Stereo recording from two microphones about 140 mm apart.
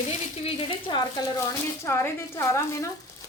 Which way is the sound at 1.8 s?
20° left (ahead or behind).